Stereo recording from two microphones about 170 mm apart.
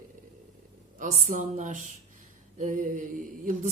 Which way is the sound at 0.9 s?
50° right (ahead or behind).